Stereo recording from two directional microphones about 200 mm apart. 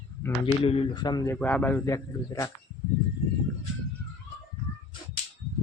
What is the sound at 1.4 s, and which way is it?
Speech, 5° left (ahead or behind).